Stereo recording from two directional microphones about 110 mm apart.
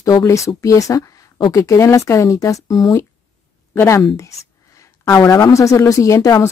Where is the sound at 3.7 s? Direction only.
20° left (ahead or behind).